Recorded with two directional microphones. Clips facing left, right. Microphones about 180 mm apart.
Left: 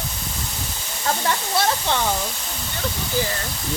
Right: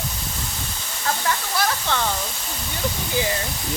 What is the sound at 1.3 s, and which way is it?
Speech, 25° left (ahead or behind).